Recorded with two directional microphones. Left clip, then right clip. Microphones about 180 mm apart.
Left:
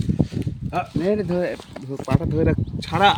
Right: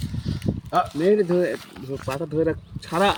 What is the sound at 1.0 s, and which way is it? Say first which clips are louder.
Speech: right 2 dB; 45° left (ahead or behind).